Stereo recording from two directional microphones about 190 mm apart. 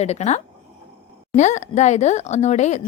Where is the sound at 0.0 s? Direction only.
35° left (ahead or behind).